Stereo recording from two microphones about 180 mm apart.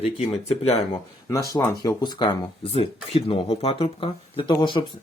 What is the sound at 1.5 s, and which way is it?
Speech, 20° left (ahead or behind).